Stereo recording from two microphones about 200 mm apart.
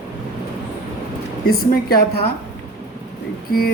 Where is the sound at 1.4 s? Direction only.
50° left (ahead or behind).